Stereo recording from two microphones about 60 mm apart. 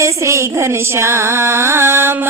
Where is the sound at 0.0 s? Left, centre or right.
Right.